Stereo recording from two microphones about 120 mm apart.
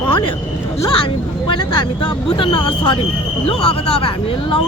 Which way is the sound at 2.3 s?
45° left (ahead or behind).